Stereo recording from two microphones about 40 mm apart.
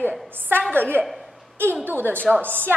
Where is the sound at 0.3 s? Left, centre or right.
Right.